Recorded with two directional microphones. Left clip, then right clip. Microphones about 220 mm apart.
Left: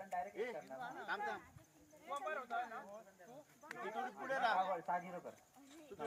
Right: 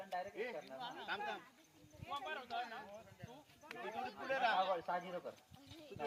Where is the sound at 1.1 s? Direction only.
15° right (ahead or behind).